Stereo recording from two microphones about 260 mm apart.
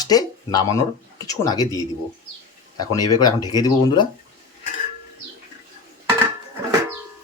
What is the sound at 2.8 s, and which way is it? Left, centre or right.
Speech, centre.